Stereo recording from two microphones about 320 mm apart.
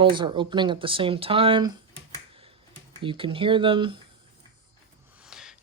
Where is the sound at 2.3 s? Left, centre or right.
Centre.